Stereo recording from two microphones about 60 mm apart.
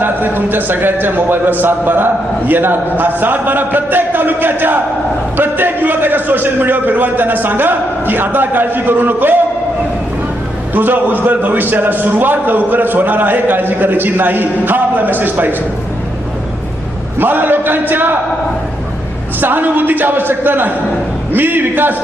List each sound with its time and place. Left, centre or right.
0.0 s a man's voice: right
10.8 s a man's voice: right
17.2 s a man's voice: right
19.4 s a man's voice: right